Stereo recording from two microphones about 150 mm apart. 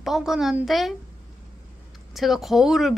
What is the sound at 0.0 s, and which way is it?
Speech, centre (ahead or behind).